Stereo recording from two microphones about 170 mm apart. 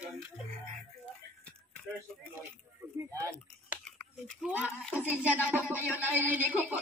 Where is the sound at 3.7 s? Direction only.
10° right (ahead or behind).